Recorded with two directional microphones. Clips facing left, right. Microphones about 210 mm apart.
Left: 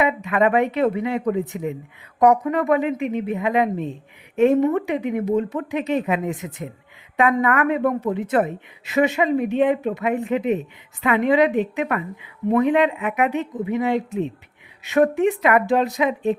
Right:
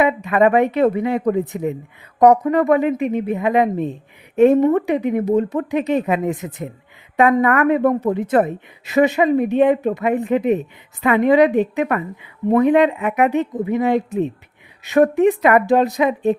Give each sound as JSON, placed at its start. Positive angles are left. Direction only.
{"t": 0.0, "sound": "a woman's voice", "side_deg": -40}